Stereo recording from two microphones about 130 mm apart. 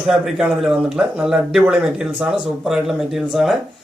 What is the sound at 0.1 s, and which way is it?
Speech, 5° right (ahead or behind).